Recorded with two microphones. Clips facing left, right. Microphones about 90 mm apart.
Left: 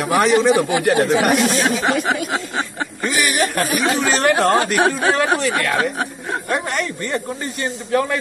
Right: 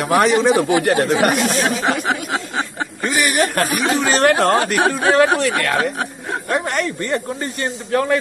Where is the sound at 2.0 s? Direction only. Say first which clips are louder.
Left 1 dB; 35° right (ahead or behind).